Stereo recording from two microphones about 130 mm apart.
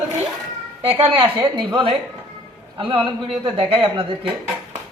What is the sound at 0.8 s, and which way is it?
A man's voice, 45° right (ahead or behind).